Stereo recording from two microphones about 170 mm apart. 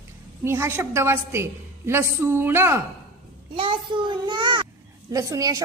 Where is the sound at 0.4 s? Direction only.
15° right (ahead or behind).